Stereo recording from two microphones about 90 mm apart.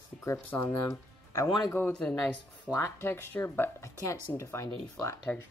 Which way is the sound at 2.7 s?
25° left (ahead or behind).